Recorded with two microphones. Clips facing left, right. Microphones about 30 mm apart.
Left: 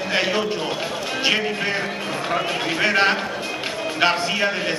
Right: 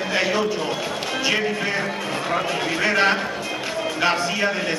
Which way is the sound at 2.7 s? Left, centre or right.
Left.